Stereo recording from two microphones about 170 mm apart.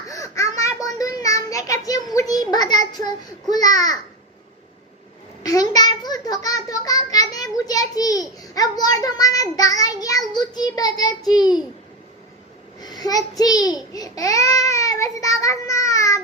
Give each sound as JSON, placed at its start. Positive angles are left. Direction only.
{"t": 0.1, "sound": "child singing", "side_deg": 20}
{"t": 2.1, "sound": "a sound", "side_deg": 20}
{"t": 3.5, "sound": "a child's voice", "side_deg": 25}
{"t": 5.4, "sound": "a child's voice", "side_deg": 20}
{"t": 12.8, "sound": "a child's voice", "side_deg": 25}